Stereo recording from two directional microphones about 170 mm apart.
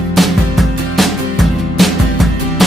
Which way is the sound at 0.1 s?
Centre (ahead or behind).